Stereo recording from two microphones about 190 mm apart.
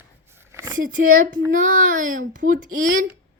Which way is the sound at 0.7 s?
45° right (ahead or behind).